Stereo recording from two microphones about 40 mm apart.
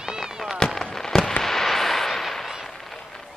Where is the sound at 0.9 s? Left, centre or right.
Centre.